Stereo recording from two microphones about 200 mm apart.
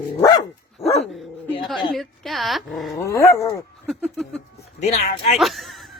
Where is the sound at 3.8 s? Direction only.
Centre (ahead or behind).